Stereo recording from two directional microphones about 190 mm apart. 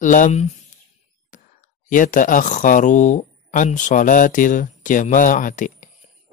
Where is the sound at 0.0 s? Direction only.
40° left (ahead or behind).